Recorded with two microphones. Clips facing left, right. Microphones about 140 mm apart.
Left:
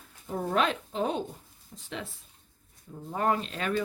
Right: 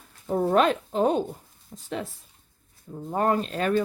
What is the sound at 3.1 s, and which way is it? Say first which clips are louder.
Speech: right 4 dB; 45° right (ahead or behind).